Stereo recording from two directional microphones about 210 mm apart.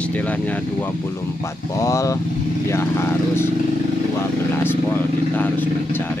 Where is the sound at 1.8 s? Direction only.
15° left (ahead or behind).